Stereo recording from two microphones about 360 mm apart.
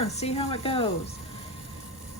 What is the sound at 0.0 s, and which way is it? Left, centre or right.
A woman's voice, centre.